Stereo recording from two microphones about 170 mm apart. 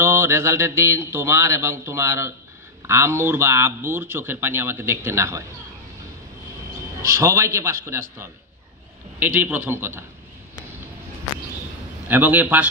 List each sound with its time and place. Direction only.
0.0 s a man's voice: 15° right (ahead or behind)
7.0 s a man's voice: 15° right (ahead or behind)
12.1 s a man's voice: 10° right (ahead or behind)